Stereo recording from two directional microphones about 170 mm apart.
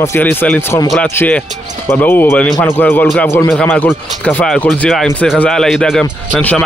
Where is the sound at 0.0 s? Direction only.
10° left (ahead or behind).